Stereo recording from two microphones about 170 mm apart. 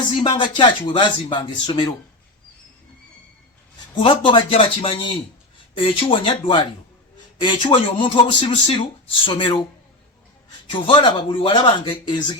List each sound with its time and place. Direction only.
0.2 s speech: 30° left (ahead or behind)
3.9 s speech: 30° left (ahead or behind)
10.7 s speech: 30° left (ahead or behind)